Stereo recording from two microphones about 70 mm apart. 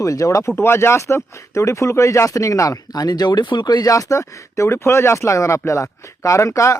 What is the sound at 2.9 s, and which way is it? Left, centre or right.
Speech, left.